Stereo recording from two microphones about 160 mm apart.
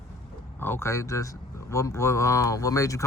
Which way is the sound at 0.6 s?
15° left (ahead or behind).